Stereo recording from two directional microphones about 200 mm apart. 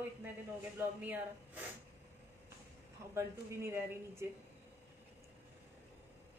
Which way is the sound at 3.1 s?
15° right (ahead or behind).